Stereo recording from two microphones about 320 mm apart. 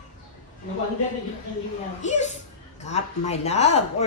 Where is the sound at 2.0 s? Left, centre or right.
Left.